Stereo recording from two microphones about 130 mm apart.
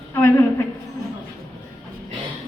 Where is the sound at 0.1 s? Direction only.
20° left (ahead or behind).